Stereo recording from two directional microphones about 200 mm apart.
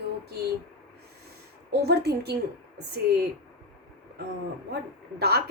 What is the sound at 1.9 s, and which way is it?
Speech, 55° right (ahead or behind).